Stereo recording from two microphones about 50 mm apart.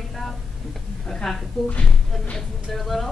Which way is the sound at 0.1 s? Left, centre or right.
Centre.